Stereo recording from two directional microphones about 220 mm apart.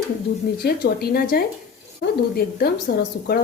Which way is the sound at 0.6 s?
45° left (ahead or behind).